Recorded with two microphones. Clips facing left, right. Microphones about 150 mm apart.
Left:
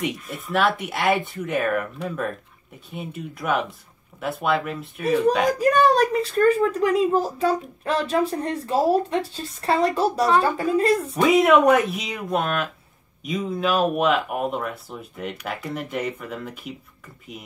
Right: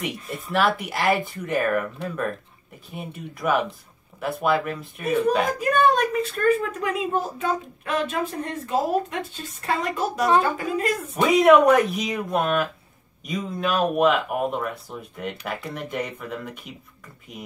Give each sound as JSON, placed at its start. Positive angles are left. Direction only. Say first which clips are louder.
{"t": 0.5, "sound": "speech", "louder": "left 1 dB", "side_deg": 0}
{"t": 5.6, "sound": "speech", "louder": "left 2 dB", "side_deg": 35}
{"t": 11.1, "sound": "speech", "louder": "right 2 dB", "side_deg": 0}